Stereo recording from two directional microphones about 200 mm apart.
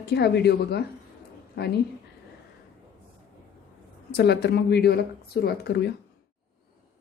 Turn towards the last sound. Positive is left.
turn(degrees=55)  # may be behind; listen again after turning